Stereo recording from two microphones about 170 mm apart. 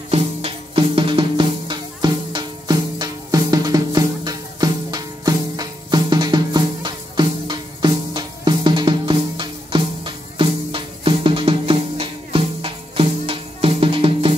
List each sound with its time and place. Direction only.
0.1 s music: 35° right (ahead or behind)